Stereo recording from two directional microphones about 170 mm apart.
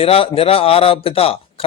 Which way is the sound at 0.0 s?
35° left (ahead or behind).